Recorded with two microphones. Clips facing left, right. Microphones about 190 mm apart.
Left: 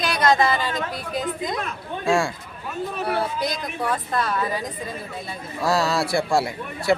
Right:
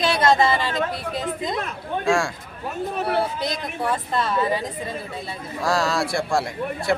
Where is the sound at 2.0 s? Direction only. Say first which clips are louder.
Left 1 dB; centre (ahead or behind).